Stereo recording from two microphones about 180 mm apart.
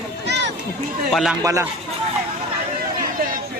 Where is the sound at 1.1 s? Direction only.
Centre (ahead or behind).